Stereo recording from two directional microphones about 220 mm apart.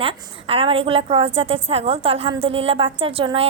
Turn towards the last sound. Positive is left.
turn(degrees=-25)  # may be behind; listen again after turning